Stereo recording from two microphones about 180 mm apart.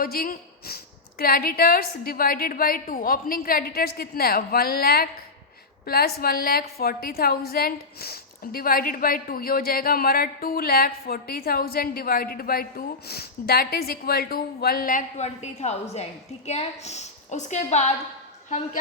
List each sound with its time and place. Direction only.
0.0 s a woman's voice: 55° left (ahead or behind)